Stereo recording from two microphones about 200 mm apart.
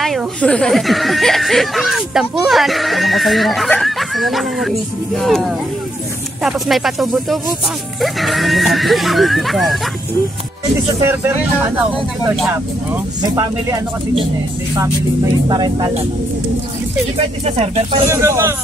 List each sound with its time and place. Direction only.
0.0 s speech: 5° left (ahead or behind)
11.0 s speech: 10° right (ahead or behind)
13.2 s speech: 15° right (ahead or behind)
15.4 s speech: 20° right (ahead or behind)
17.2 s speech: 30° right (ahead or behind)
18.0 s speech: 15° right (ahead or behind)